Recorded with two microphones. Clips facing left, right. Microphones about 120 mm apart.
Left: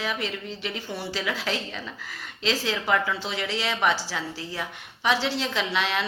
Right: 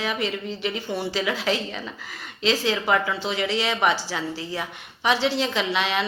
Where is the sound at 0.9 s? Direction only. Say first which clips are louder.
Right 4 dB; 20° right (ahead or behind).